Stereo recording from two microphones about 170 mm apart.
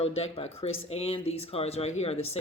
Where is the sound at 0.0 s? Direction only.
35° left (ahead or behind).